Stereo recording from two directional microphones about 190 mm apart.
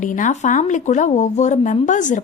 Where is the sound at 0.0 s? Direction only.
40° left (ahead or behind).